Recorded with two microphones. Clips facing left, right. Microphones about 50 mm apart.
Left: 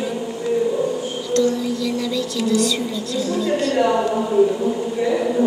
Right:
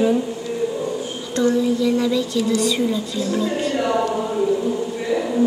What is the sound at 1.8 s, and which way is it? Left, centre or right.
Speech, centre.